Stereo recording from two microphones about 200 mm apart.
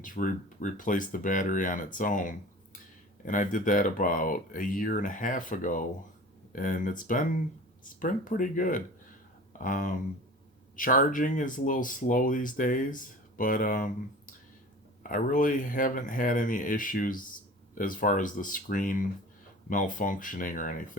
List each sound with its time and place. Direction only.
0.0 s speech: 40° left (ahead or behind)
15.1 s speech: 40° left (ahead or behind)